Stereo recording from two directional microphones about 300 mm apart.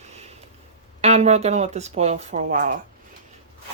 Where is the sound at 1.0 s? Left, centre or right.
Right.